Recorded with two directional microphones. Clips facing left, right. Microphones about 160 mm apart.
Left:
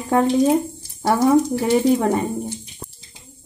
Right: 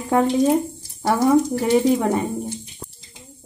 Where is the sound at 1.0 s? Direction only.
10° left (ahead or behind).